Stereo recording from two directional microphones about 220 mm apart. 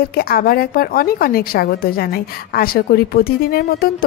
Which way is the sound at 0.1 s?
45° left (ahead or behind).